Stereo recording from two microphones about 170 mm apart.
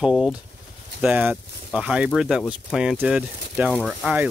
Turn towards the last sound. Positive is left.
turn(degrees=0)  # may be behind; listen again after turning